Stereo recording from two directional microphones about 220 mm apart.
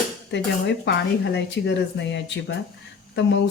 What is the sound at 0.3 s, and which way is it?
Speech, 55° left (ahead or behind).